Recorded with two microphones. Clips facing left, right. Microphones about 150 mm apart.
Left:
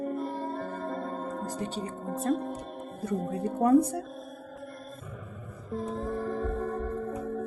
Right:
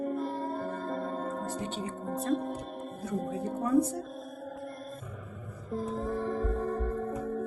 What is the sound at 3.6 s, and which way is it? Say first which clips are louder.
Speech: left 5 dB; 60° left (ahead or behind).